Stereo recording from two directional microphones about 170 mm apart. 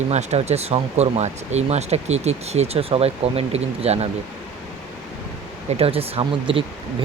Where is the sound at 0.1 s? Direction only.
40° right (ahead or behind).